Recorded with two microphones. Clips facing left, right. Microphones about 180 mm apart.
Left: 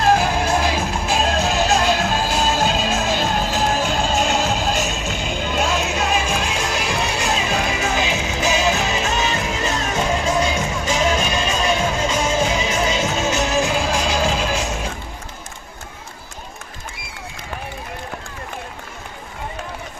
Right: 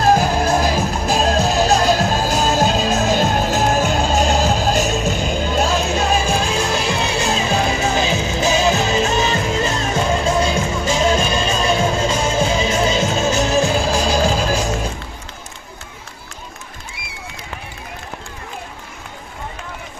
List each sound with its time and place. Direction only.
0.0 s music: 40° right (ahead or behind)